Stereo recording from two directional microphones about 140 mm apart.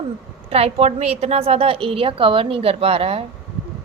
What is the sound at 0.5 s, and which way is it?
A woman's voice, 45° right (ahead or behind).